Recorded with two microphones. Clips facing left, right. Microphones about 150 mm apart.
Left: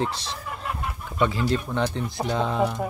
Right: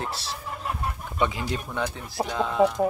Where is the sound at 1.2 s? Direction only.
15° right (ahead or behind).